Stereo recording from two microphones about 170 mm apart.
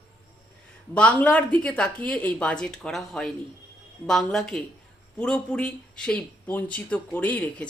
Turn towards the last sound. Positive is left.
turn(degrees=10)  # may be behind; listen again after turning